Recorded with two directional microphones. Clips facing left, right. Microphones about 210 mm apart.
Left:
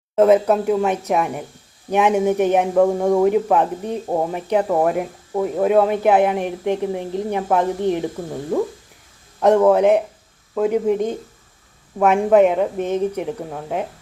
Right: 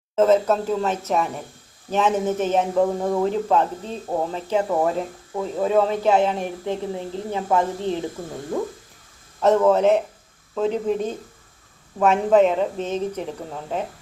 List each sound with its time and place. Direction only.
0.2 s speech: 15° left (ahead or behind)
9.4 s speech: 15° left (ahead or behind)